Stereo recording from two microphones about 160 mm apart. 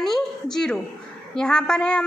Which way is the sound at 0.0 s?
5° left (ahead or behind).